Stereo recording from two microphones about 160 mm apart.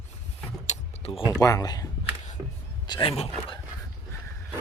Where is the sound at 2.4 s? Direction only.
20° right (ahead or behind).